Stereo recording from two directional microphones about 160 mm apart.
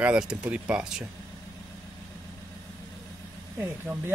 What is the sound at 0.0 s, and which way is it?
Speech, 5° right (ahead or behind).